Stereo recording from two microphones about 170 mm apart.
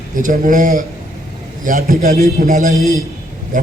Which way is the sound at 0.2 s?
50° right (ahead or behind).